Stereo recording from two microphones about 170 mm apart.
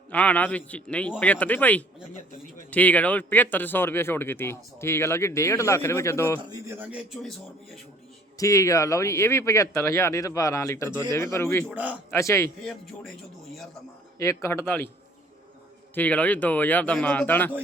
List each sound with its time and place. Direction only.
0.1 s a man's voice: 10° left (ahead or behind)
6.5 s a man's voice: 15° right (ahead or behind)
8.4 s a man's voice: 20° left (ahead or behind)
11.7 s a man's voice: 10° right (ahead or behind)
12.1 s a man's voice: 15° left (ahead or behind)
12.6 s speech: centre (ahead or behind)
14.2 s a man's voice: 15° left (ahead or behind)
16.0 s a man's voice: 10° left (ahead or behind)